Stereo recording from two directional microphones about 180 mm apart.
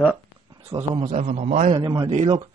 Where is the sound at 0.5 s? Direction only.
30° right (ahead or behind).